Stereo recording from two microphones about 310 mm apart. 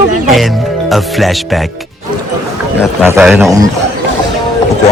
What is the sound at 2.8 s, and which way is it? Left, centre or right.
Speech, centre.